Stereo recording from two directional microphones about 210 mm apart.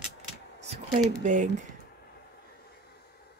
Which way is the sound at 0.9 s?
35° right (ahead or behind).